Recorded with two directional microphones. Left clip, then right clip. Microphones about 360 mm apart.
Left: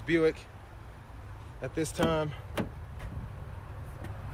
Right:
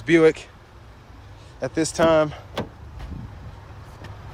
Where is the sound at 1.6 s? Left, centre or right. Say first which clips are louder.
Right 11 dB; centre.